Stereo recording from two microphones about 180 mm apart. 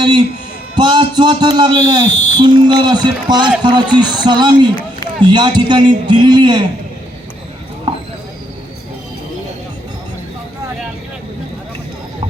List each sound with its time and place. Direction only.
0.8 s a man's voice: 25° right (ahead or behind)